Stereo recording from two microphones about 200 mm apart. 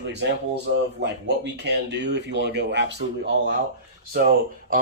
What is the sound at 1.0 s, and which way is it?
Speech, 60° right (ahead or behind).